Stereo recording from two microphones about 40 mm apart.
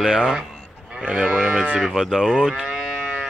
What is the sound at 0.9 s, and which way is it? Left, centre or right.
Livestock, right.